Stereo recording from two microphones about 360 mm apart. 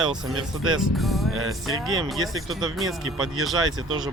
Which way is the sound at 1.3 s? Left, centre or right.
Right.